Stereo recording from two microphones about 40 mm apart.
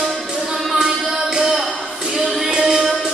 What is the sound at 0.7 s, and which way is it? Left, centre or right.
Music, centre.